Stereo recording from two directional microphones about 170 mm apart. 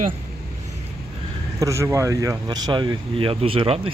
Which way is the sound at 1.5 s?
20° right (ahead or behind).